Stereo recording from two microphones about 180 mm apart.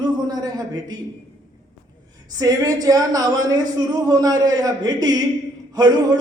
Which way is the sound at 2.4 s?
20° right (ahead or behind).